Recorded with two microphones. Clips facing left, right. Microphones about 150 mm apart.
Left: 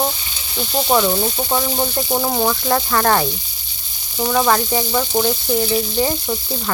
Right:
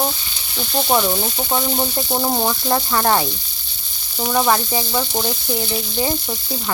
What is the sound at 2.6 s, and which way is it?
Speech, 20° right (ahead or behind).